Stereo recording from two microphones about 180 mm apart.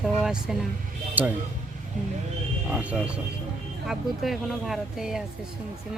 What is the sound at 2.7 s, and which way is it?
Speech, 5° right (ahead or behind).